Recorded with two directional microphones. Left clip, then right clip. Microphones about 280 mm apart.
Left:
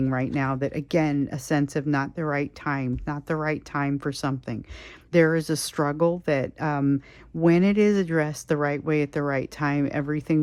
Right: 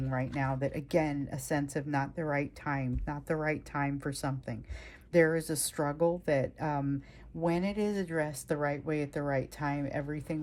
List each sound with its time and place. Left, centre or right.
0.3 s speech: centre